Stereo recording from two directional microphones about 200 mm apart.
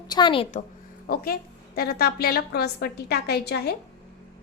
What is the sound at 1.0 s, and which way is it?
A woman's voice, 50° left (ahead or behind).